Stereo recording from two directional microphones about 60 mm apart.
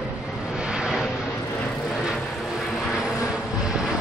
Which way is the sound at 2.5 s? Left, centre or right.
Centre.